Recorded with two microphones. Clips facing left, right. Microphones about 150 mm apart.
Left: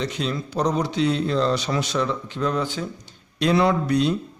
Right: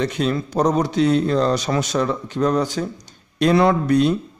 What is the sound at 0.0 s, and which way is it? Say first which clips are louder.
A man's voice: right 5 dB; 50° right (ahead or behind).